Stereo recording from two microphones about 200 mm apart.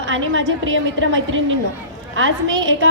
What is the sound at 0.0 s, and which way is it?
A woman's voice, 70° right (ahead or behind).